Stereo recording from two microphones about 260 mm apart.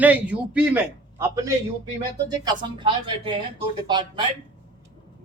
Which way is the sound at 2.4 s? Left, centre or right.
Centre.